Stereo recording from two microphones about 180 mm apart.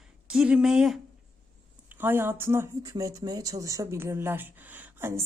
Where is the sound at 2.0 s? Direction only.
10° right (ahead or behind).